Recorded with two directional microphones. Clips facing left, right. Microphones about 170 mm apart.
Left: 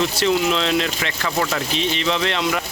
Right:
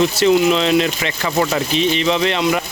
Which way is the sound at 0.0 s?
5° right (ahead or behind).